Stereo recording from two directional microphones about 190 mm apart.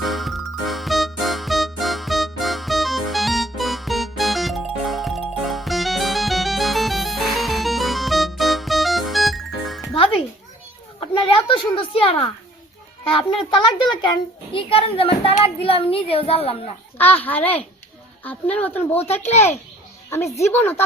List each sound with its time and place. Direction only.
0.0 s music: centre (ahead or behind)
11.0 s a sound: 25° left (ahead or behind)
14.5 s speech: 30° left (ahead or behind)
17.2 s a woman's voice: 10° left (ahead or behind)
20.4 s a woman's voice: 10° left (ahead or behind)